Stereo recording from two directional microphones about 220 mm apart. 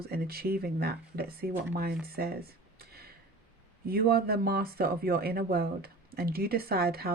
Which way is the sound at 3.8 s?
45° right (ahead or behind).